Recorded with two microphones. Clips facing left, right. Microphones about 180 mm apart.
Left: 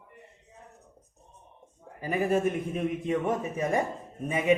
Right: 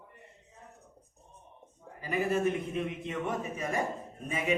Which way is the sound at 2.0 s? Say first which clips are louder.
Left 3 dB; 45° left (ahead or behind).